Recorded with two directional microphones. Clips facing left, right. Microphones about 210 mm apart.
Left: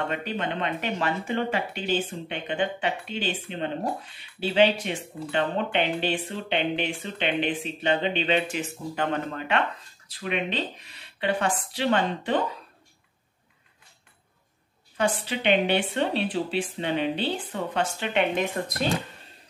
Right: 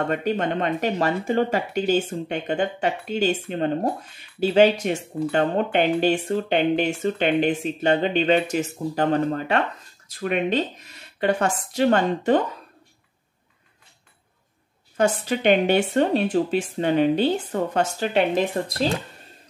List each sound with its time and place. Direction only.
0.1 s speech: 45° right (ahead or behind)
15.0 s speech: 45° right (ahead or behind)